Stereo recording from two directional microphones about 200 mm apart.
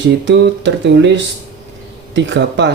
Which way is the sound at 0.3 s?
60° right (ahead or behind).